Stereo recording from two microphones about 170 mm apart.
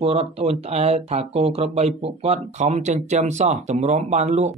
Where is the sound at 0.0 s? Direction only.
35° right (ahead or behind).